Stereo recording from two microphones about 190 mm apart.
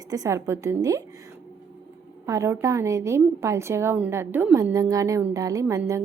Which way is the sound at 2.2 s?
15° right (ahead or behind).